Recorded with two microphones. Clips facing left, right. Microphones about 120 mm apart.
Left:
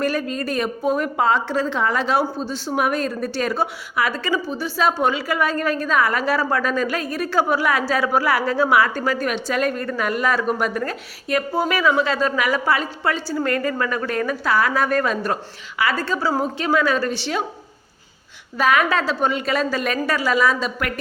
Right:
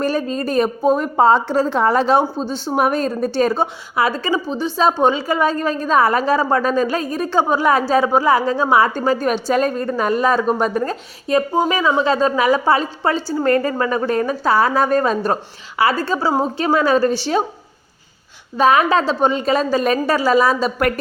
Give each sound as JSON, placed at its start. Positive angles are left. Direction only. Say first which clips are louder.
{"t": 0.0, "sound": "a woman's voice", "louder": "right 3 dB", "side_deg": -30}
{"t": 18.5, "sound": "a woman's voice", "louder": "right 4 dB", "side_deg": -30}